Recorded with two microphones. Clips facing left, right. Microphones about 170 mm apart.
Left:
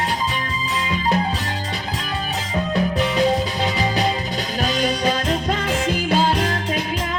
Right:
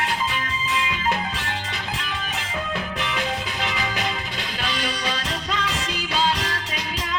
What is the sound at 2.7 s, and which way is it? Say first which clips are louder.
Music: left 11 dB; 35° left (ahead or behind).